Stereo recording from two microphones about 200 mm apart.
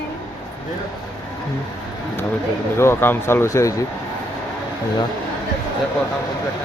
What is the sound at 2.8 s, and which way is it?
A man's voice, 10° left (ahead or behind).